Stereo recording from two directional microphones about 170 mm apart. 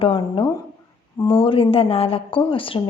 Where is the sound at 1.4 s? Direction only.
30° left (ahead or behind).